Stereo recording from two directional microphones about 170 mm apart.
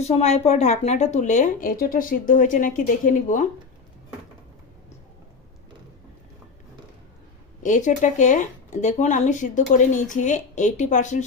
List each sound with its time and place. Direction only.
0.0 s speech: 40° left (ahead or behind)
7.6 s speech: 45° left (ahead or behind)